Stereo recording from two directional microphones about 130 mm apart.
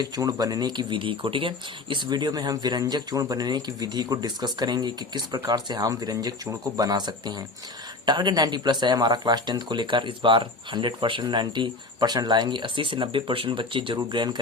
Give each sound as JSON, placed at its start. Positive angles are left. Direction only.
{"t": 0.0, "sound": "speech", "side_deg": -30}